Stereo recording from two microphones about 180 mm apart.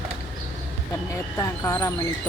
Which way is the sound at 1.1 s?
15° left (ahead or behind).